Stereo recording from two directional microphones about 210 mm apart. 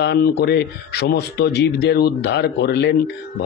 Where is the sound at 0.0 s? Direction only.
50° left (ahead or behind).